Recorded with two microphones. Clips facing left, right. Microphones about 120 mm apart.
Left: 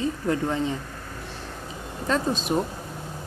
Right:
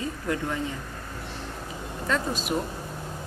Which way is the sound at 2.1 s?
25° left (ahead or behind).